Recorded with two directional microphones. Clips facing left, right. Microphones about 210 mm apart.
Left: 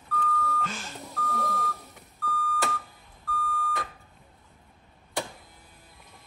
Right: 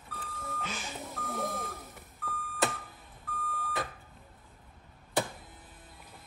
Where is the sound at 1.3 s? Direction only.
20° right (ahead or behind).